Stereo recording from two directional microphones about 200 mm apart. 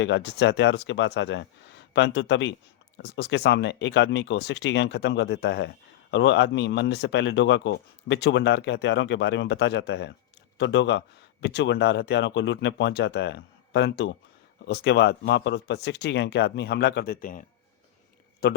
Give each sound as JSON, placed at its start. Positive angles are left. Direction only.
{"t": 0.0, "sound": "speech", "side_deg": 60}
{"t": 18.4, "sound": "speech", "side_deg": 50}